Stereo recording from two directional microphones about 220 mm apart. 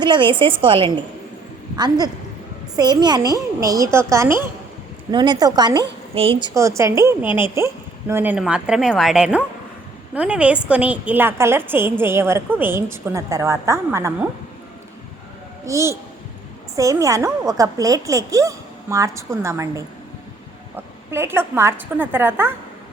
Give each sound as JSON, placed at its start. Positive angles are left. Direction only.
{"t": 0.0, "sound": "a woman's voice", "side_deg": -20}
{"t": 6.5, "sound": "a woman's voice", "side_deg": -15}
{"t": 15.6, "sound": "a woman's voice", "side_deg": -15}